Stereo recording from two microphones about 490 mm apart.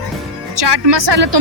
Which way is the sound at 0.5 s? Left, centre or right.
Right.